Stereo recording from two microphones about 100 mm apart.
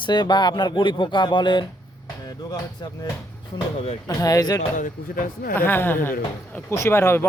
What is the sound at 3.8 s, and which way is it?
Speech, 75° left (ahead or behind).